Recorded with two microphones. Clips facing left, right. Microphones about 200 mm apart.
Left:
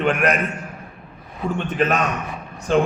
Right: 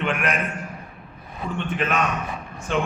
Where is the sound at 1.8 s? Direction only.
40° left (ahead or behind).